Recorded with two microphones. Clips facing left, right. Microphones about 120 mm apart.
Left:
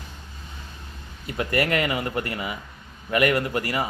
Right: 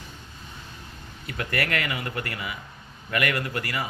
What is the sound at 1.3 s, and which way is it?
A man's voice, 20° left (ahead or behind).